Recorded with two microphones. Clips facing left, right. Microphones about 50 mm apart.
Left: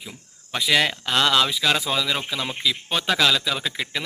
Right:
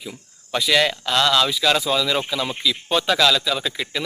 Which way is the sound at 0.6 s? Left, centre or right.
Centre.